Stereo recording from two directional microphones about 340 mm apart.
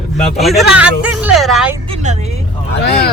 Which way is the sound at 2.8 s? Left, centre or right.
Left.